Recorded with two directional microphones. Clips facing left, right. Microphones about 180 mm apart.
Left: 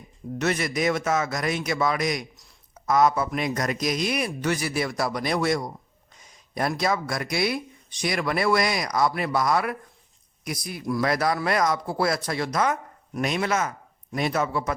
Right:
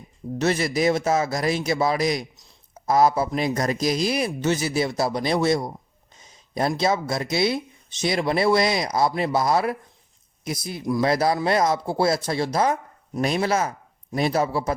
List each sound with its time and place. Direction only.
0.3 s speech: 30° right (ahead or behind)